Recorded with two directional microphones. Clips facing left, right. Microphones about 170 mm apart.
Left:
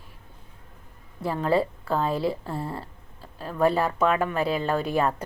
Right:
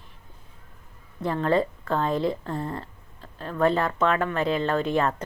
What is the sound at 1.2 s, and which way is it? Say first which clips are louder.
Speech: right 1 dB; 5° left (ahead or behind).